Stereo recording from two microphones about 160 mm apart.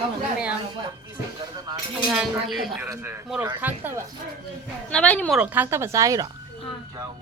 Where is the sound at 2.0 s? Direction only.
5° right (ahead or behind).